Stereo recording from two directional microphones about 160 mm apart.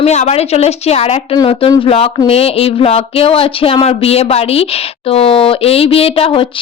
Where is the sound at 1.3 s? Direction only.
35° left (ahead or behind).